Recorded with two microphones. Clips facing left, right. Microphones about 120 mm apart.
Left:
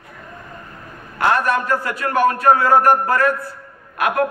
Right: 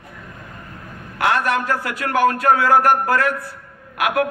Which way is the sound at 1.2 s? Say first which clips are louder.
Left 1 dB; 80° right.